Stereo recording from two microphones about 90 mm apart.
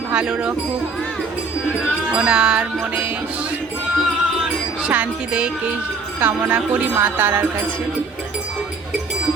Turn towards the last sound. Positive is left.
turn(degrees=-20)  # may be behind; listen again after turning